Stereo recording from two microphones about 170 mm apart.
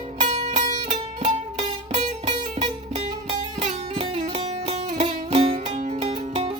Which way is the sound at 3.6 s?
40° right (ahead or behind).